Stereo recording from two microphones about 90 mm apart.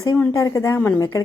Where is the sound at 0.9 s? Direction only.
40° left (ahead or behind).